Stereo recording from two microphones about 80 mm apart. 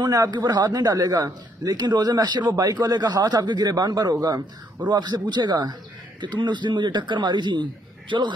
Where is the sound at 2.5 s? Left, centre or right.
Right.